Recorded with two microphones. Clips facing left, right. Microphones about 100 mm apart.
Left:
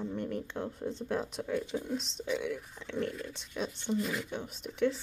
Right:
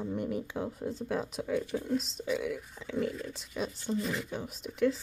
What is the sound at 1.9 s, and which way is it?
Speech, 5° right (ahead or behind).